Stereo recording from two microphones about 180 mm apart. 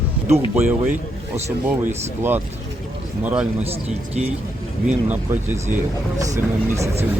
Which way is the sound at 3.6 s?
35° right (ahead or behind).